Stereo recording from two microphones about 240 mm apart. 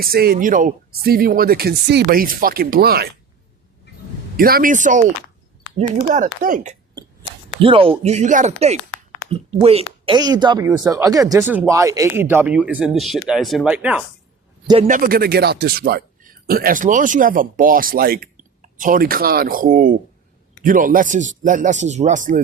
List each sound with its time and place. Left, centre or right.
0.0 s speech: right
4.4 s speech: right
7.6 s speech: right; by 14.0 s centre
14.8 s speech: right